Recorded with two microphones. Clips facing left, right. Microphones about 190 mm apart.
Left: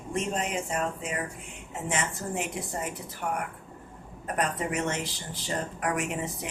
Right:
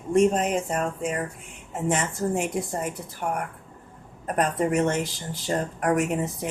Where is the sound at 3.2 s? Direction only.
35° right (ahead or behind).